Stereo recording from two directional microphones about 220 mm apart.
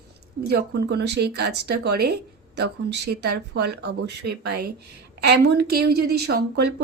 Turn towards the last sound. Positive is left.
turn(degrees=-50)  # may be behind; listen again after turning